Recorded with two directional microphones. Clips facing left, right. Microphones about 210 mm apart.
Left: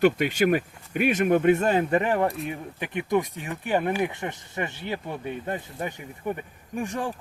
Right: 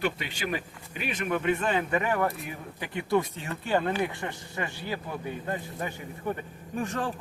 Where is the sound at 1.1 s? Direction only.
45° left (ahead or behind).